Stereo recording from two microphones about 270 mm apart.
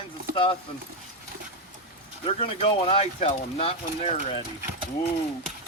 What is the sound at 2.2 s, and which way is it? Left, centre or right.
Speech, left.